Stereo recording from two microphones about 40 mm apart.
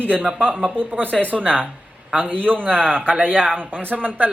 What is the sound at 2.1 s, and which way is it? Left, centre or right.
Speech, right.